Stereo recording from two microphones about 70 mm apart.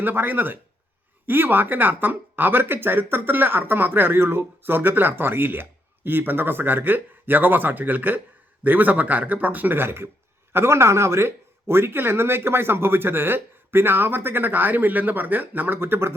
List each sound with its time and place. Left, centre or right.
0.0 s speech: right